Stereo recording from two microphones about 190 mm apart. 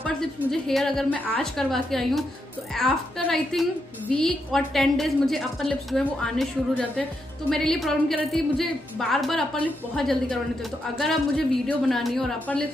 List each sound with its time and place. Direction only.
0.0 s a woman's voice: centre (ahead or behind)